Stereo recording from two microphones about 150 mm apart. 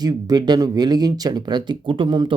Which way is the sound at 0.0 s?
25° right (ahead or behind).